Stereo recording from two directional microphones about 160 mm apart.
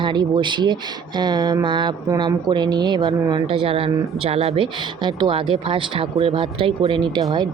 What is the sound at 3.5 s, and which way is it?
Speech, 35° right (ahead or behind).